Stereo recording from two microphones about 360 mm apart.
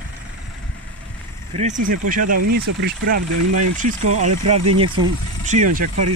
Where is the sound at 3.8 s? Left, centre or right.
Right.